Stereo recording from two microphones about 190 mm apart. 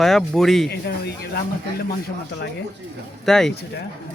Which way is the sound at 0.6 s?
60° left (ahead or behind).